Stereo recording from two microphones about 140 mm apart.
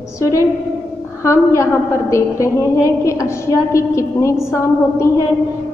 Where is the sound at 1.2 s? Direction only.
20° left (ahead or behind).